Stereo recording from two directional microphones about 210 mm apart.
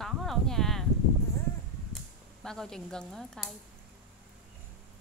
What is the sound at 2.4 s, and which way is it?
Speech, centre (ahead or behind).